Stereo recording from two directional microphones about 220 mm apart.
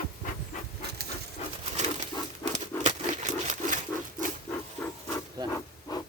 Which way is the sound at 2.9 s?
30° right (ahead or behind).